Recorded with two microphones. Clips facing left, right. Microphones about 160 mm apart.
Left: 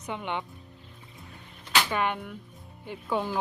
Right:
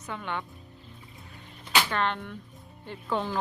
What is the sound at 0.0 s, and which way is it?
Speech, 20° left (ahead or behind).